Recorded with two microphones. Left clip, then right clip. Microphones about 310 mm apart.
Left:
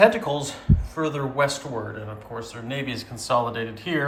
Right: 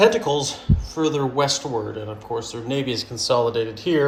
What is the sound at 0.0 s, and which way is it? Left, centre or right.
Speech, centre.